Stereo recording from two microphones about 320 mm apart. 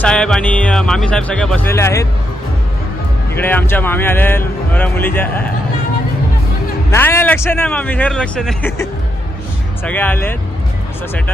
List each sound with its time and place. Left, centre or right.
0.0 s speech: centre
3.3 s speech: centre
6.9 s speech: centre